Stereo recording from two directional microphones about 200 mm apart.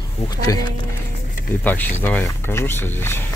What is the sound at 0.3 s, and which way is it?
Speech, 20° left (ahead or behind).